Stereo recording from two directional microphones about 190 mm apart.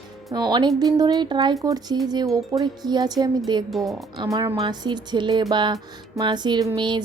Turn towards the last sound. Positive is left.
turn(degrees=-25)  # may be behind; listen again after turning